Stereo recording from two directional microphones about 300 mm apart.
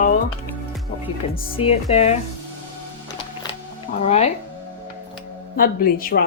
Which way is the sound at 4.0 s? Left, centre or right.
Left.